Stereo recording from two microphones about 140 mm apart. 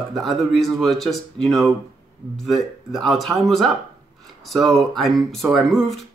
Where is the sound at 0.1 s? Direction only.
Centre (ahead or behind).